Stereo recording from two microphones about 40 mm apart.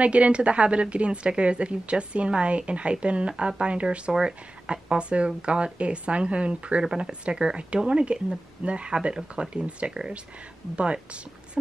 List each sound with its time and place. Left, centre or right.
0.0 s a woman's voice: right
11.6 s speech: centre